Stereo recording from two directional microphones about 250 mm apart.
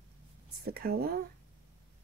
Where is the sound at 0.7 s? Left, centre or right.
Right.